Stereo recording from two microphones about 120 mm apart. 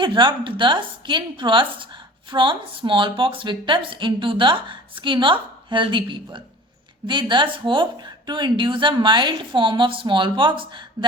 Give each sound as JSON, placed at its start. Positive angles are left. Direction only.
{"t": 0.0, "sound": "a woman's voice", "side_deg": -40}